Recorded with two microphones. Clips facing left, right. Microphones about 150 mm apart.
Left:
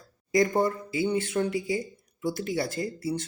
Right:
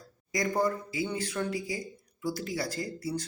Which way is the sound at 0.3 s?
25° left (ahead or behind).